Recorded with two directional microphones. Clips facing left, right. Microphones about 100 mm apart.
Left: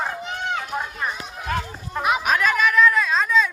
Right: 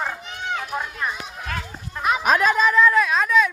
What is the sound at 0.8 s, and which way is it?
Run, 10° left (ahead or behind).